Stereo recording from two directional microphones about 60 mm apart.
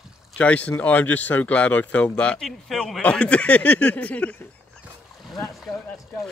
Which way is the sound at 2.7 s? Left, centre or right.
Centre.